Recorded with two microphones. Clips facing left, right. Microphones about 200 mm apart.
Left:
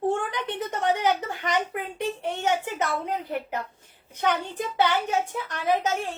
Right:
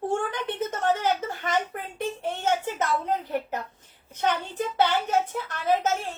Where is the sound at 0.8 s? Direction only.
15° left (ahead or behind).